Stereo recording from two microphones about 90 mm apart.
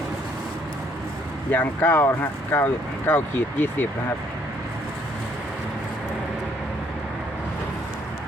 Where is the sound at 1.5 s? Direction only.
20° left (ahead or behind).